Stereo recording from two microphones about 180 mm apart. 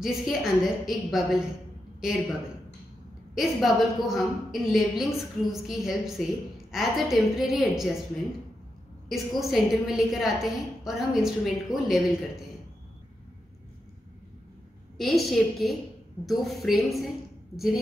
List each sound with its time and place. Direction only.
0.0 s a woman's voice: centre (ahead or behind)
3.3 s a woman's voice: centre (ahead or behind)
9.1 s a woman's voice: centre (ahead or behind)
15.0 s a woman's voice: centre (ahead or behind)